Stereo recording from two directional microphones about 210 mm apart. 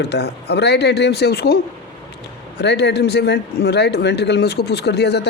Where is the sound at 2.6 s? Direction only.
55° left (ahead or behind).